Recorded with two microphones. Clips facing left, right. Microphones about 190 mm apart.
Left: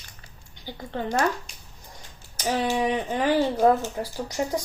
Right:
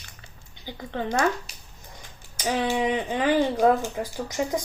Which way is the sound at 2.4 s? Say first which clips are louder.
Even; 15° right (ahead or behind).